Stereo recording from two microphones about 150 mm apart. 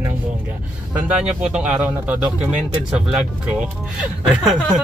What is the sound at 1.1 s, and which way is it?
Speech, 5° right (ahead or behind).